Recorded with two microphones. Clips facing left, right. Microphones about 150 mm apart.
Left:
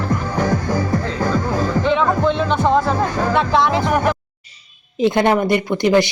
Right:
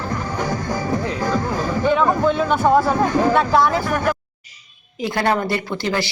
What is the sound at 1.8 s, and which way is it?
Music, 5° right (ahead or behind).